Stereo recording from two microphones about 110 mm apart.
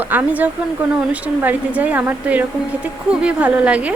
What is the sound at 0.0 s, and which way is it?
A woman's voice, 15° right (ahead or behind).